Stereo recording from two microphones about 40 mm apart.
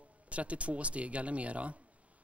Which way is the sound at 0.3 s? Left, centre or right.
Right.